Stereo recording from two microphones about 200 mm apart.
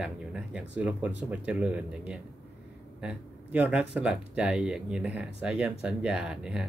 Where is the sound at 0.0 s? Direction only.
5° right (ahead or behind).